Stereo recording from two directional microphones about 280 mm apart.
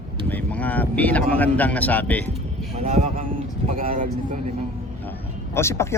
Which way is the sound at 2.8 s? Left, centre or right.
Right.